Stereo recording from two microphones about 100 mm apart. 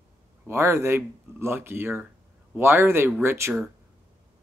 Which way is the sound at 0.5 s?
25° right (ahead or behind).